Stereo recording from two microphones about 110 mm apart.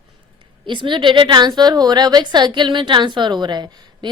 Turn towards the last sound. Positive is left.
turn(degrees=-40)  # may be behind; listen again after turning